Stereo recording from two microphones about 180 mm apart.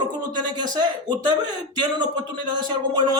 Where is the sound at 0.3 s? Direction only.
25° right (ahead or behind).